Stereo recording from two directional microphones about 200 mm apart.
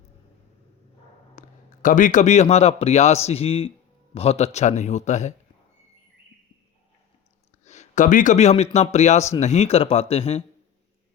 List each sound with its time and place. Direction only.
1.4 s a man's voice: 40° left (ahead or behind)
7.6 s a man's voice: 35° left (ahead or behind)